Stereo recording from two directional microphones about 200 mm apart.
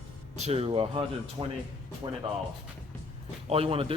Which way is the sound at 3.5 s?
30° right (ahead or behind).